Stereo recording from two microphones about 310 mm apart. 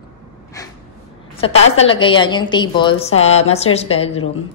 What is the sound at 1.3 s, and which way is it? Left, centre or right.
A woman's voice, centre.